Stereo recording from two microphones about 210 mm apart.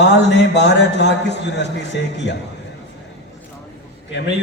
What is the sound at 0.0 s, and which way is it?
A man's voice, 55° left (ahead or behind).